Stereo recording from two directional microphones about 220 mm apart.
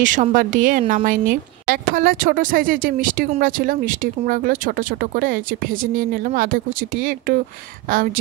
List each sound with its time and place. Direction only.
0.0 s a woman's voice: 35° right (ahead or behind)